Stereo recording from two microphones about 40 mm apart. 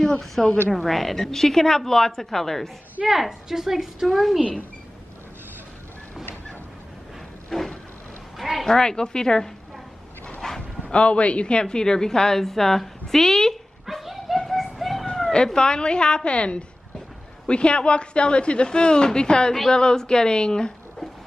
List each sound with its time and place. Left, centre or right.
0.4 s a woman's voice: centre
3.1 s speech: centre
7.4 s a sound: centre
8.6 s speech: centre
10.4 s dog: centre
10.9 s a woman's voice: left; by 13.6 s centre
13.8 s a sound: centre
15.3 s speech: centre